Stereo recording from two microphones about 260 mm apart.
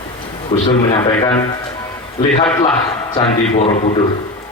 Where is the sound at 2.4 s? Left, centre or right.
Centre.